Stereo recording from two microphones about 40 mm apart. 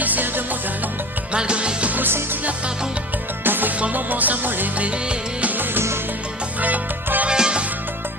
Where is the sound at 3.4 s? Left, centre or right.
Right.